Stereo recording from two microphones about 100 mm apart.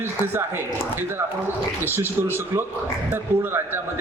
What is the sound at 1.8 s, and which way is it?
A man's voice, 20° right (ahead or behind).